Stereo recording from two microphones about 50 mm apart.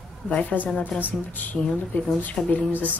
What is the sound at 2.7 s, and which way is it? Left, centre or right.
Speech, right.